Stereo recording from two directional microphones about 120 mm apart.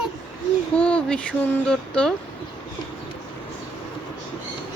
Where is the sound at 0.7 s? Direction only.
10° left (ahead or behind).